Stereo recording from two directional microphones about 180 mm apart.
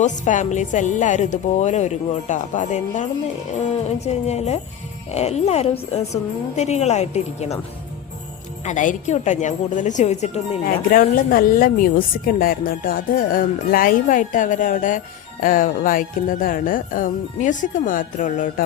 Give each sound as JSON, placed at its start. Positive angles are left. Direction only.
{"t": 0.0, "sound": "a woman's voice", "side_deg": 45}
{"t": 8.6, "sound": "a woman's voice", "side_deg": 45}
{"t": 10.6, "sound": "speech", "side_deg": 55}